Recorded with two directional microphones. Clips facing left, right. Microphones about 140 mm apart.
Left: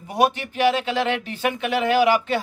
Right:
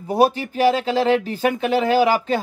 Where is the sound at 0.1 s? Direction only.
35° right (ahead or behind).